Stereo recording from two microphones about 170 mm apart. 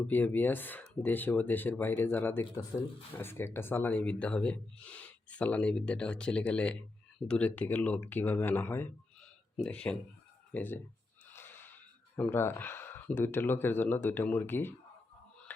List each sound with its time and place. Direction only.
0.1 s speech: 10° left (ahead or behind)
11.3 s wheeze: 10° left (ahead or behind)
12.1 s speech: 15° left (ahead or behind)